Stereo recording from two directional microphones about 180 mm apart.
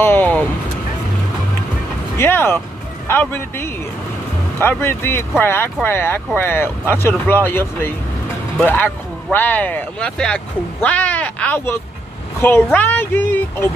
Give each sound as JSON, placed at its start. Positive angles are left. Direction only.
{"t": 0.0, "sound": "vehicle", "side_deg": 10}
{"t": 2.1, "sound": "a woman's voice", "side_deg": 15}